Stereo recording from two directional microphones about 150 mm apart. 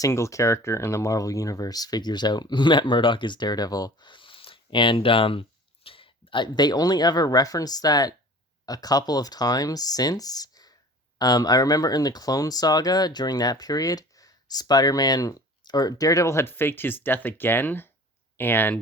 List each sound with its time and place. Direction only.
0.0 s speech: 20° left (ahead or behind)